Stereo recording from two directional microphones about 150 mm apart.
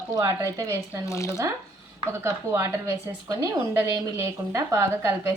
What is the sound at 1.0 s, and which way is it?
Speech, 20° left (ahead or behind).